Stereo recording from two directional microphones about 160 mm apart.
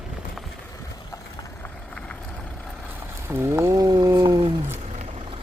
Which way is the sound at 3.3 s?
15° right (ahead or behind).